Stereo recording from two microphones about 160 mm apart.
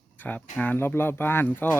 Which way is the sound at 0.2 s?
10° left (ahead or behind).